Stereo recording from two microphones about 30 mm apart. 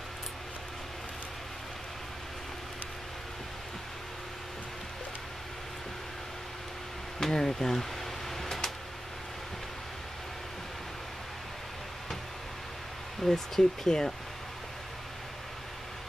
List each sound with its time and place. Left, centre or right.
7.2 s speech: centre
8.4 s a sound: centre
13.2 s speech: centre